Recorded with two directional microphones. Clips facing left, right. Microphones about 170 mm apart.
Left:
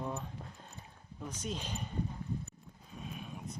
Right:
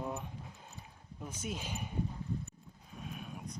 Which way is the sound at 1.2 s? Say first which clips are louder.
Left 1 dB; 10° right (ahead or behind).